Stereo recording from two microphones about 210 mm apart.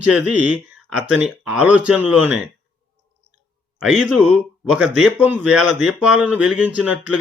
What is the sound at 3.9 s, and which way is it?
Speech, 5° right (ahead or behind).